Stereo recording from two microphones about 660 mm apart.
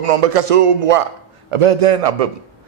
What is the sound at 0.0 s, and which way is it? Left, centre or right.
A man's voice, right.